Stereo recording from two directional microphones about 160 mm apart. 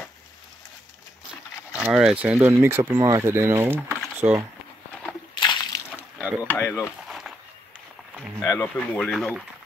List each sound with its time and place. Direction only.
1.8 s speech: 5° right (ahead or behind)
5.3 s slosh: 30° left (ahead or behind)
6.1 s a sound: 10° right (ahead or behind)
6.4 s speech: 10° left (ahead or behind)
7.1 s a sound: centre (ahead or behind)
8.4 s speech: 25° left (ahead or behind)
8.6 s speech: 5° left (ahead or behind)